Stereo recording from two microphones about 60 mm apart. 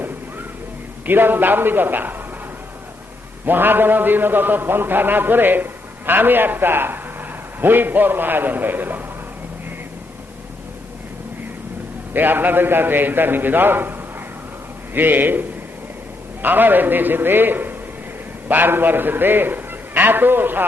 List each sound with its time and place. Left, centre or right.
1.0 s a man's voice: right
3.4 s a man's voice: right
12.1 s a man's voice: right
14.9 s a man's voice: right